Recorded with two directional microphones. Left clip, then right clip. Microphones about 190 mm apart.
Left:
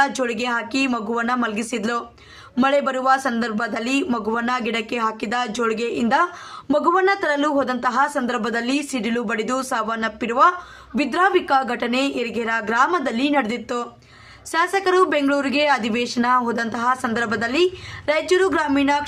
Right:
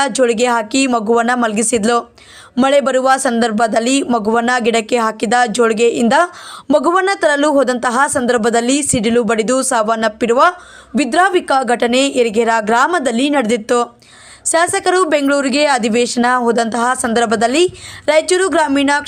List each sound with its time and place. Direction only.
0.0 s speech: 35° right (ahead or behind)